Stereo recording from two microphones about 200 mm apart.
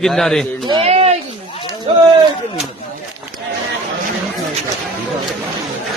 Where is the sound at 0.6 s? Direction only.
25° right (ahead or behind).